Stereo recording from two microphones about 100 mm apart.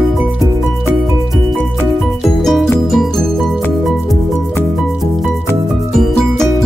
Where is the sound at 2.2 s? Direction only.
Centre (ahead or behind).